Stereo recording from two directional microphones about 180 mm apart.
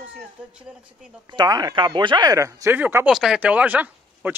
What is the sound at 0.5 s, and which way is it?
Speech, 5° right (ahead or behind).